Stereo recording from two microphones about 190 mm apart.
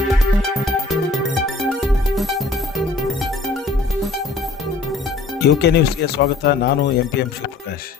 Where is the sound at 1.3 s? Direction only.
Centre (ahead or behind).